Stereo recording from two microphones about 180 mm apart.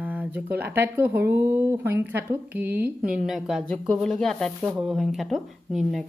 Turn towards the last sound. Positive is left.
turn(degrees=0)  # may be behind; listen again after turning